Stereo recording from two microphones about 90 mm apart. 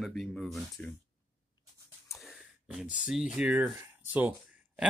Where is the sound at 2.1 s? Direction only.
Centre (ahead or behind).